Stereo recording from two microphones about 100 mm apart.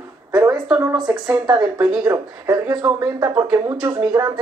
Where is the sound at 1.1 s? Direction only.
20° right (ahead or behind).